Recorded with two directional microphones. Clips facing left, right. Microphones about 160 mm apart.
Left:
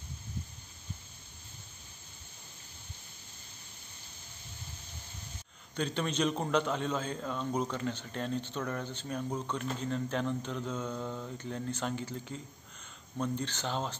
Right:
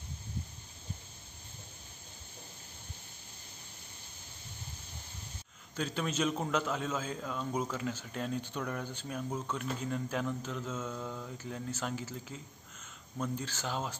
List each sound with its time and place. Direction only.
5.8 s a man's voice: 5° right (ahead or behind)